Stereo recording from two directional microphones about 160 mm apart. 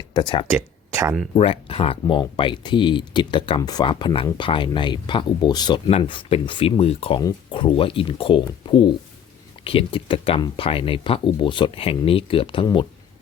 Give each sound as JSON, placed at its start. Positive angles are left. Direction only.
{"t": 0.1, "sound": "speech", "side_deg": 30}
{"t": 0.5, "sound": "a sound", "side_deg": -15}
{"t": 1.4, "sound": "speech", "side_deg": 35}
{"t": 7.2, "sound": "speech", "side_deg": 30}